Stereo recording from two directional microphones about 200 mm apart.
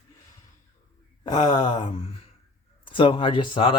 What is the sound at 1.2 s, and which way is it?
Speech, 20° left (ahead or behind).